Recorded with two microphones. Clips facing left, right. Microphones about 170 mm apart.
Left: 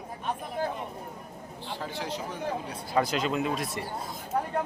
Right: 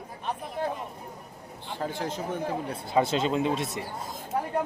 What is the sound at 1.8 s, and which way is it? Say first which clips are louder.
Speech: right 4 dB; 50° right (ahead or behind).